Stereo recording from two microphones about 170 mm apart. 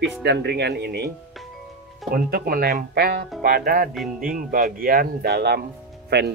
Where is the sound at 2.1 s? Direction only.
60° right (ahead or behind).